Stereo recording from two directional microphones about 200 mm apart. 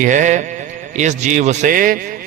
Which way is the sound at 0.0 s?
40° right (ahead or behind).